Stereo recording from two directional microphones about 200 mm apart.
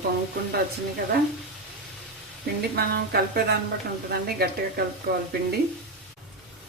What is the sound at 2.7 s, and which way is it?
Speech, 50° right (ahead or behind).